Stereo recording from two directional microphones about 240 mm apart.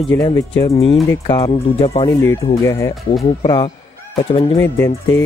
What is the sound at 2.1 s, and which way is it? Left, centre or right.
Speech, centre.